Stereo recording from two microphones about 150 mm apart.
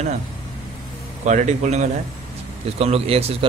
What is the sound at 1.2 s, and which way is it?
Speech, 50° right (ahead or behind).